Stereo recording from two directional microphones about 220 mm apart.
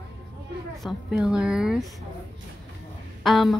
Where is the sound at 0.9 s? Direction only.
5° right (ahead or behind).